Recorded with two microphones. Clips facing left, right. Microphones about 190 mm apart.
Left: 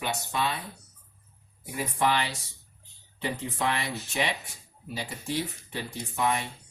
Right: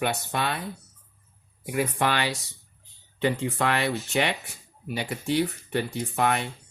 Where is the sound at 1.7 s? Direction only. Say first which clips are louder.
Right 2 dB; 75° right (ahead or behind).